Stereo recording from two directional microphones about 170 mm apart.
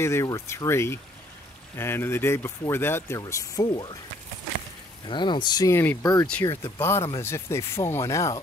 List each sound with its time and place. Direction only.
0.0 s speech: 15° left (ahead or behind)
5.0 s speech: 30° left (ahead or behind)